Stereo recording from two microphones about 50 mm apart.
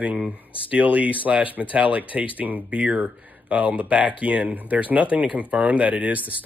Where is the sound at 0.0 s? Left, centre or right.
Right.